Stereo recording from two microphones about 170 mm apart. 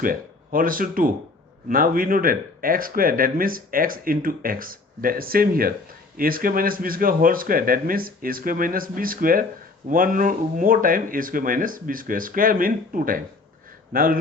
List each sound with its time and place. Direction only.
0.0 s speech: 55° right (ahead or behind)